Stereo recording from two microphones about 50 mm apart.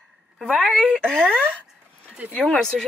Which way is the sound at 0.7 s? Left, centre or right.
Centre.